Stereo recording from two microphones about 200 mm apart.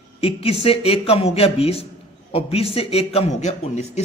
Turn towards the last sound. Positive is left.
turn(degrees=35)  # may be behind; listen again after turning